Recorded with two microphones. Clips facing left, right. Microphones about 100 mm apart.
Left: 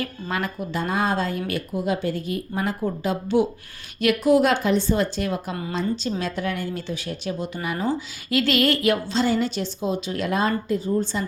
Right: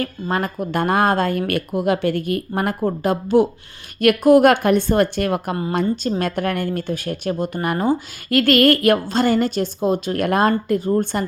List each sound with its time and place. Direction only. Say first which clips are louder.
0.0 s speech: right 5 dB; 45° right (ahead or behind)